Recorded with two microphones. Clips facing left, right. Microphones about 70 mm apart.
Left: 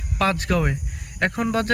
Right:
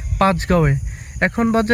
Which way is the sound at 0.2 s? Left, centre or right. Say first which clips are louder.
Right 6 dB; right.